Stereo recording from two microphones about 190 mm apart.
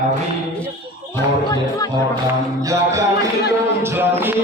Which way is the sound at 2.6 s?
15° right (ahead or behind).